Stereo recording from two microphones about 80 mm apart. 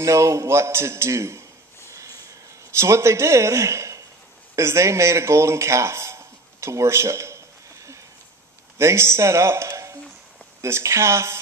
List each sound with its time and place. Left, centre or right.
0.0 s a man's voice: right
2.7 s a man's voice: right